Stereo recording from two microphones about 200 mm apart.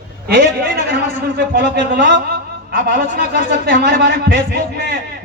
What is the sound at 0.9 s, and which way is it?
Speech, 60° right (ahead or behind).